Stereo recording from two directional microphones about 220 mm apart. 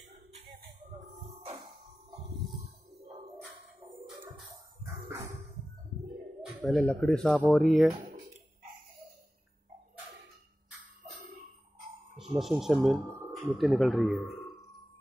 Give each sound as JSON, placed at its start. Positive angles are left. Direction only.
{"t": 0.3, "sound": "music", "side_deg": -30}
{"t": 6.6, "sound": "speech", "side_deg": 0}
{"t": 12.4, "sound": "speech", "side_deg": 0}
{"t": 12.9, "sound": "speech", "side_deg": -10}
{"t": 13.6, "sound": "speech", "side_deg": 0}